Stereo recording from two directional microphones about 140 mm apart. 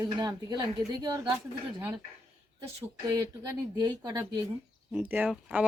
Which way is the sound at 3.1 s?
25° right (ahead or behind).